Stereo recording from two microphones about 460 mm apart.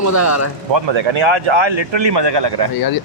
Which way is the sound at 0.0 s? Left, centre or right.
Left.